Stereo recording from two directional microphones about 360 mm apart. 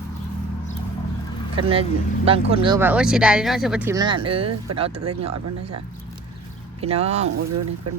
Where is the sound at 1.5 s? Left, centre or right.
Centre.